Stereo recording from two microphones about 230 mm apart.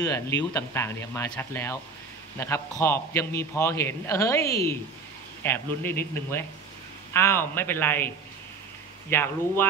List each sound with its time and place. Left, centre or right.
0.0 s a man's voice: centre
9.1 s a man's voice: centre